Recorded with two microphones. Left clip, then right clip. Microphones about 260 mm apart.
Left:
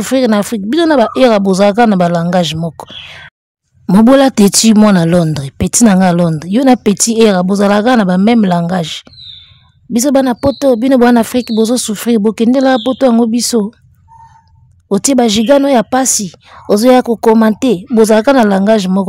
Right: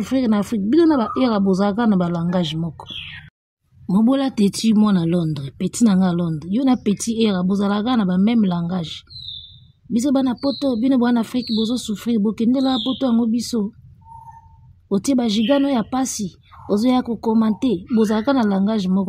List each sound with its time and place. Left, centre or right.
0.0 s a woman's voice: left
14.9 s a woman's voice: left